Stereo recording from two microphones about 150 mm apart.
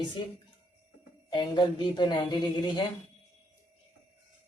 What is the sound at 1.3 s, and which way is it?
Speech, 30° left (ahead or behind).